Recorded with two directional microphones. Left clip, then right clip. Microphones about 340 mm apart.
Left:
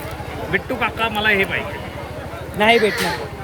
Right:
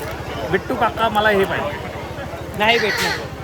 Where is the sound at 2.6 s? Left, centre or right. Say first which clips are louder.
Left 2 dB; centre.